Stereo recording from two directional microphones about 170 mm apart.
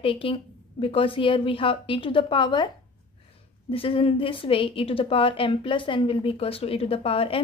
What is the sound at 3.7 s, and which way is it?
A woman's voice, 30° left (ahead or behind).